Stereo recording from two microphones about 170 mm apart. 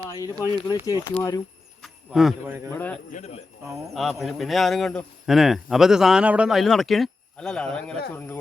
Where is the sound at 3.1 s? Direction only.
40° left (ahead or behind).